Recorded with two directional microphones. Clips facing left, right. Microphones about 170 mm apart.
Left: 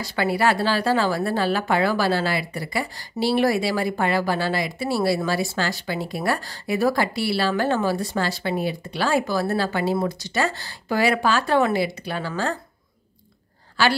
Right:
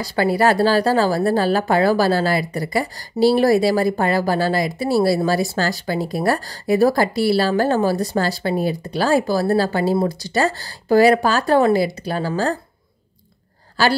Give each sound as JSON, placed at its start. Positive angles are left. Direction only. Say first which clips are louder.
{"t": 0.0, "sound": "speech", "louder": "right 4 dB", "side_deg": -40}
{"t": 13.8, "sound": "speech", "louder": "right 3 dB", "side_deg": -40}